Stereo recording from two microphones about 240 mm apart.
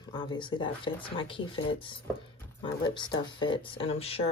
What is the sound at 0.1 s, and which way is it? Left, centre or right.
Speech, centre.